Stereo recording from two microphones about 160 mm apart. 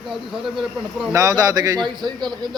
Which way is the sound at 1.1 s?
20° right (ahead or behind).